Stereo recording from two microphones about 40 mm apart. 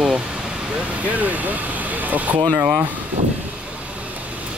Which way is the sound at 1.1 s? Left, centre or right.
Right.